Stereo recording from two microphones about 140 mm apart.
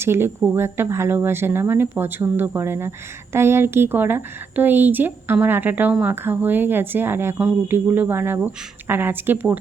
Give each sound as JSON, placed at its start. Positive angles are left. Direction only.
{"t": 0.0, "sound": "a woman's voice", "side_deg": -15}